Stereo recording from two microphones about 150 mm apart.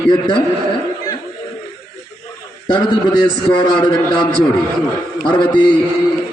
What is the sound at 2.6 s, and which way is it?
A man's voice, 30° left (ahead or behind).